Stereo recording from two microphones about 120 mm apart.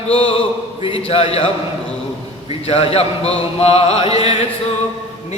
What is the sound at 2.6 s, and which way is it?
Chant, 55° left (ahead or behind).